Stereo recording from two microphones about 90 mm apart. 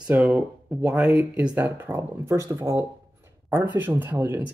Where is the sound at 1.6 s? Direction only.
25° right (ahead or behind).